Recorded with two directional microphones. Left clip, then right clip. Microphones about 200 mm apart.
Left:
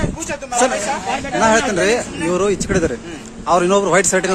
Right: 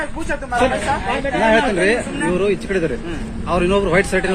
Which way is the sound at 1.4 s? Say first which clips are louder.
Left 1 dB; 30° left (ahead or behind).